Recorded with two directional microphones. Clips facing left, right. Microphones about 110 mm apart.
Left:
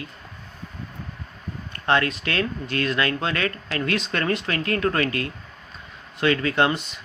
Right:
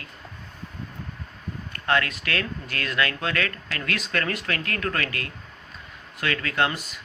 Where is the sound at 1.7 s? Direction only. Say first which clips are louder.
Left 3 dB; 25° left (ahead or behind).